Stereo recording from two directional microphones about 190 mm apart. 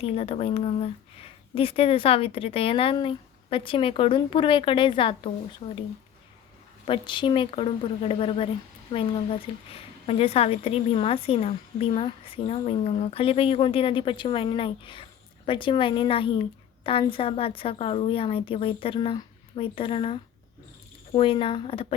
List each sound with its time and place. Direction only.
0.0 s speech: 30° left (ahead or behind)
6.8 s a woman's voice: 25° left (ahead or behind)